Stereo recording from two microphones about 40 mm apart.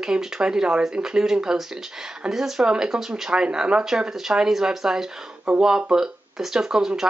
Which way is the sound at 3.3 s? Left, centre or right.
Right.